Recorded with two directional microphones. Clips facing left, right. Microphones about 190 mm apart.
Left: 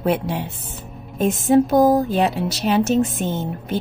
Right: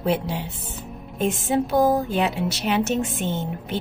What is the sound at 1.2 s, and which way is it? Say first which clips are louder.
Speech: left 6 dB; 40° left (ahead or behind).